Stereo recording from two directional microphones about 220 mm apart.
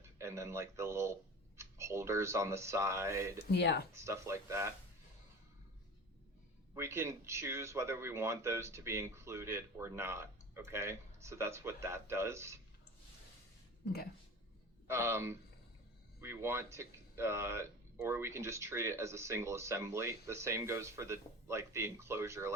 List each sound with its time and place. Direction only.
0.0 s speech: 10° right (ahead or behind)
3.5 s speech: 50° left (ahead or behind)
3.9 s speech: 15° right (ahead or behind)
6.7 s speech: 10° right (ahead or behind)
14.8 s speech: 10° right (ahead or behind)